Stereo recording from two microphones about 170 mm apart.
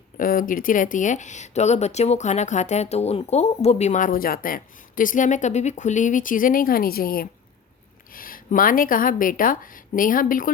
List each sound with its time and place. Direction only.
0.2 s speech: 55° left (ahead or behind)